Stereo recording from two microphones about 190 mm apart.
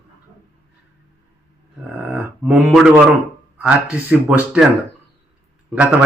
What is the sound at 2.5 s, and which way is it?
A man's voice, 5° right (ahead or behind).